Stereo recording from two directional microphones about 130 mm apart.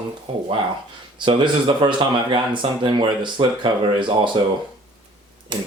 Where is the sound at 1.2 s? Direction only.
40° right (ahead or behind).